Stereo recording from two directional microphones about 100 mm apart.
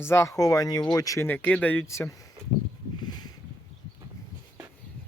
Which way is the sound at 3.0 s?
45° left (ahead or behind).